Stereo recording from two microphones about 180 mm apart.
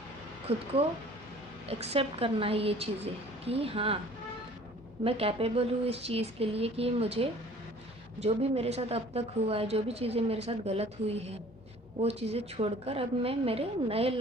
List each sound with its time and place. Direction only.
0.4 s a woman's voice: 35° right (ahead or behind)
5.0 s a woman's voice: 35° right (ahead or behind)